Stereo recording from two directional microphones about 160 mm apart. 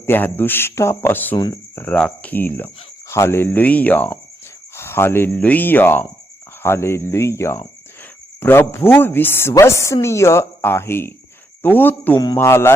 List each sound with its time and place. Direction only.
0.0 s a woman's voice: 15° left (ahead or behind)